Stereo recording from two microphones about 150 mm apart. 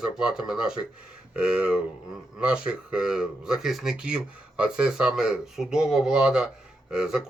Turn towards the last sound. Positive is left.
turn(degrees=-5)  # may be behind; listen again after turning